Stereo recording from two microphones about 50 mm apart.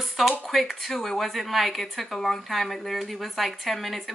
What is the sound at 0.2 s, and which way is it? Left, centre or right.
Speech, centre.